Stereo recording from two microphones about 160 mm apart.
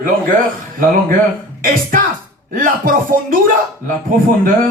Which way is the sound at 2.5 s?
55° right (ahead or behind).